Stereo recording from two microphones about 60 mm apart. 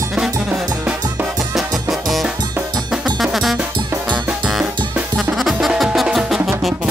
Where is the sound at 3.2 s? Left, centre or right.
Centre.